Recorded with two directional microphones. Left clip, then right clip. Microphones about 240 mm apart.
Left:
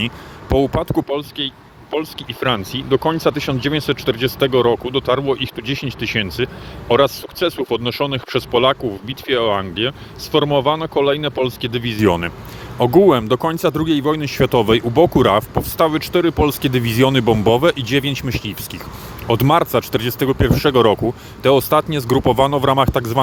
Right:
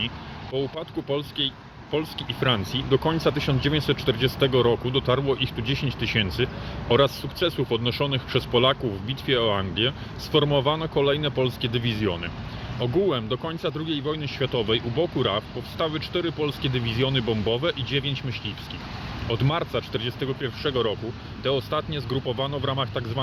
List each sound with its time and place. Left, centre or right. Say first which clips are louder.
0.5 s speech: left 13 dB; left